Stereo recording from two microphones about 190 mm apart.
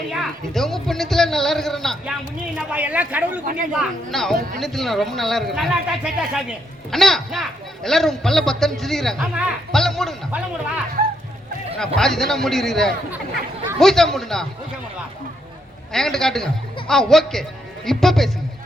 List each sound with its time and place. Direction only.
0.1 s a sound: centre (ahead or behind)
2.6 s speech: 5° right (ahead or behind)
3.4 s a woman's voice: 45° right (ahead or behind)
3.7 s a man's voice: centre (ahead or behind)
11.9 s a man's voice: centre (ahead or behind)
15.9 s a man's voice: centre (ahead or behind)